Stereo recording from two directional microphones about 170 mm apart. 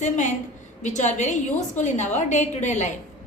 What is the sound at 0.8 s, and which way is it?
A woman's voice, 45° left (ahead or behind).